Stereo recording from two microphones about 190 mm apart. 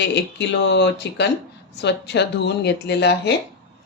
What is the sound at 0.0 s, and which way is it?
Speech, 65° left (ahead or behind).